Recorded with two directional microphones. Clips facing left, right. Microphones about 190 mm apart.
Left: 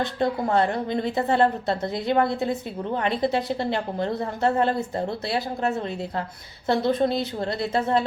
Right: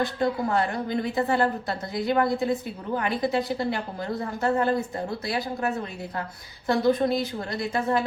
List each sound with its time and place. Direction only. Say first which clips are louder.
0.0 s a woman's voice: left 1 dB; 25° left (ahead or behind)
6.7 s a woman's voice: even; 25° left (ahead or behind)